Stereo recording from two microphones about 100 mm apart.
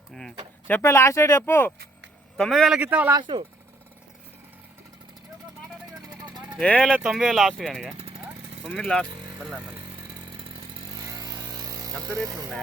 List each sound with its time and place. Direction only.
0.1 s speech: 5° left (ahead or behind)
0.7 s speech: 25° left (ahead or behind)
2.4 s speech: centre (ahead or behind)
2.7 s speech: 15° right (ahead or behind)
3.2 s speech: 50° right (ahead or behind)
6.7 s speech: 10° left (ahead or behind)
6.9 s speech: 10° right (ahead or behind)
10.9 s a sound: 35° right (ahead or behind)
12.2 s speech: 30° right (ahead or behind)